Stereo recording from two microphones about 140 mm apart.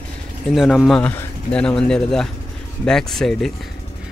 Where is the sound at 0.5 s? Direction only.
Centre (ahead or behind).